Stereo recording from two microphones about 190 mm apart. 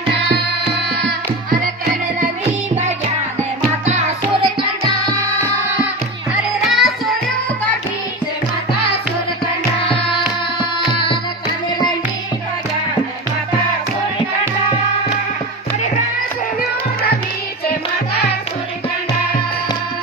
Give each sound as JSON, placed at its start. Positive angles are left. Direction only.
{"t": 3.8, "sound": "music", "side_deg": -35}
{"t": 6.3, "sound": "music", "side_deg": 0}